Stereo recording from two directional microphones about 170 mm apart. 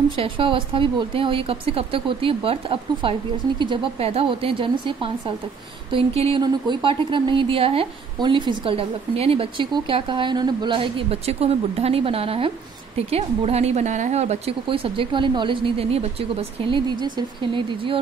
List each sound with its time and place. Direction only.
0.2 s speech: 30° right (ahead or behind)